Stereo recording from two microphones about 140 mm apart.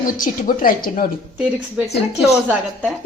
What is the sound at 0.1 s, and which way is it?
Speech, 85° left.